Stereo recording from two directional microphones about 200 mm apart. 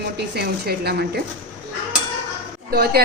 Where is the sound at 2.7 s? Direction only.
50° right (ahead or behind).